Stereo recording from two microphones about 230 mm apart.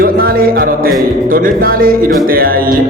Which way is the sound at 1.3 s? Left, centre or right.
Right.